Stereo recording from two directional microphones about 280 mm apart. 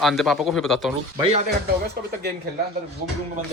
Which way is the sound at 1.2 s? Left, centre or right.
Right.